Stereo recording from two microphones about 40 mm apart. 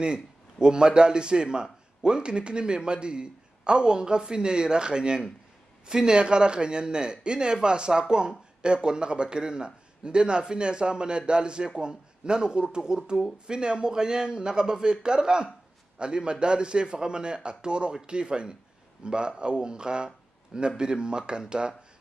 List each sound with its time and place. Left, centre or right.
0.0 s a man's voice: right